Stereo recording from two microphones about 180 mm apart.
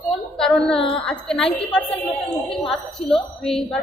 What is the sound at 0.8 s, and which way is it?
Speech, 30° left (ahead or behind).